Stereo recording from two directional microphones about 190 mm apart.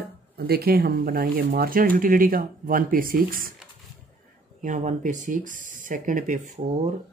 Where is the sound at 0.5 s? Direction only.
55° right (ahead or behind).